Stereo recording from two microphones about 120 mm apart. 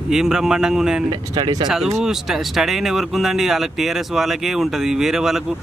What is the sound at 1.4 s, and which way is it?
Speech, 35° right (ahead or behind).